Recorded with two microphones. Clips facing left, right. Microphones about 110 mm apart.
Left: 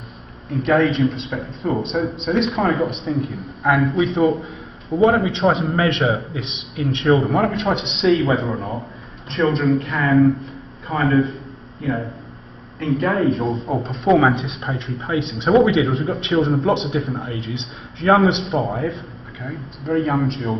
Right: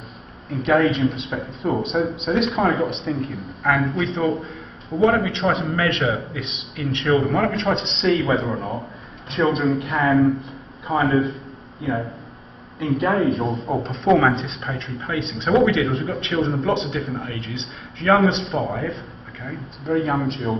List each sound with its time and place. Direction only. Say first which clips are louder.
0.5 s a man's voice: left 1 dB; centre (ahead or behind)
3.6 s a man's voice: left 3 dB; 10° left (ahead or behind)
5.0 s a man's voice: left 2 dB; 25° left (ahead or behind)
7.4 s a man's voice: left 1 dB; 5° left (ahead or behind)
9.8 s speech: right 1 dB; 25° right (ahead or behind)
10.1 s a man's voice: left 6 dB; centre (ahead or behind)
14.3 s a man's voice: left 1 dB; 15° left (ahead or behind)
14.6 s a man's voice: left 3 dB; 25° left (ahead or behind)
19.4 s a man's voice: left 1 dB; centre (ahead or behind)